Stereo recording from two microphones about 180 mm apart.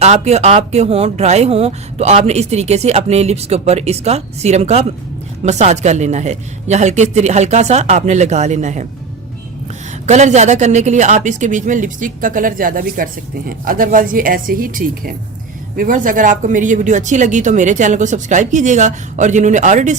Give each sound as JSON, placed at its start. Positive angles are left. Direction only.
{"t": 0.0, "sound": "speech", "side_deg": -35}
{"t": 10.1, "sound": "speech", "side_deg": -40}